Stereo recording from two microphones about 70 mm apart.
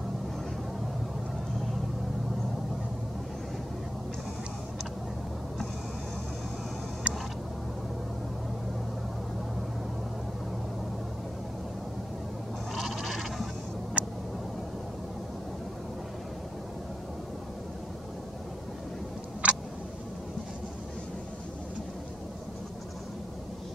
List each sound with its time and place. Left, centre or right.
7.0 s a sound: centre
12.7 s goat: centre
14.0 s vehicle: centre
19.4 s tick: centre